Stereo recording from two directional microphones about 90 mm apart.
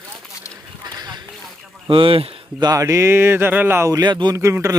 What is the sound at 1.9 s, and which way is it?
Speech, 80° right.